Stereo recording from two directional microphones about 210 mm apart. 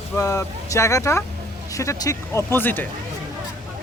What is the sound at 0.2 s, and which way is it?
Speech, 15° left (ahead or behind).